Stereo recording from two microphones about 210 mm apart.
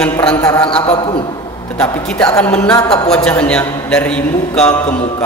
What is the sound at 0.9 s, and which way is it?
Speech, 25° left (ahead or behind).